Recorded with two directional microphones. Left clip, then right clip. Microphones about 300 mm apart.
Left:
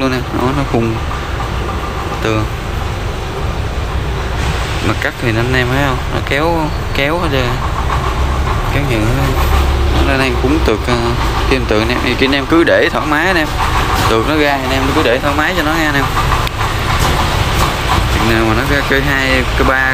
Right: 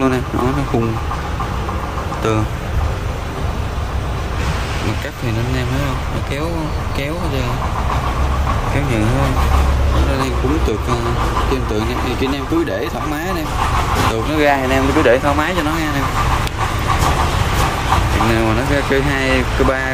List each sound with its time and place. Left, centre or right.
5.2 s speech: centre
7.0 s speech: centre
10.1 s speech: centre
18.3 s speech: centre